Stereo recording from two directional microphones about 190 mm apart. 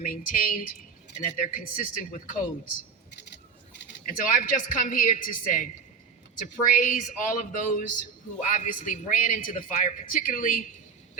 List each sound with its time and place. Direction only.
0.0 s a man's voice: 45° left (ahead or behind)
4.0 s a man's voice: 45° left (ahead or behind)
6.7 s a man's voice: 45° left (ahead or behind)